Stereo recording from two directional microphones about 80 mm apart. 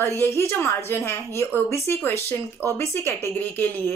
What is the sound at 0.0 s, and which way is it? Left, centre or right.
A woman's voice, left.